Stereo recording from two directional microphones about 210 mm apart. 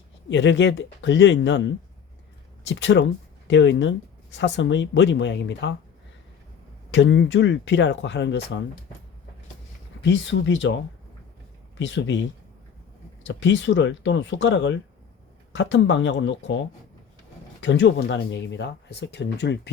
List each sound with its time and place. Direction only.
0.3 s speech: 60° left (ahead or behind)
6.9 s speech: 60° left (ahead or behind)
10.0 s speech: 60° left (ahead or behind)
11.8 s speech: 60° left (ahead or behind)
13.2 s speech: 60° left (ahead or behind)
17.6 s speech: 60° left (ahead or behind)